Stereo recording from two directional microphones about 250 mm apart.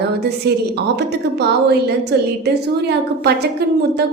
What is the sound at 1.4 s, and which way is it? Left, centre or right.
A woman's voice, right.